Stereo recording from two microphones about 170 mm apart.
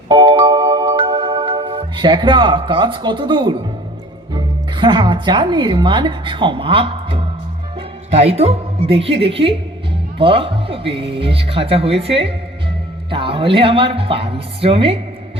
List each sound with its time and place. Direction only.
0.1 s music: 25° right (ahead or behind)
4.4 s speech: 25° right (ahead or behind)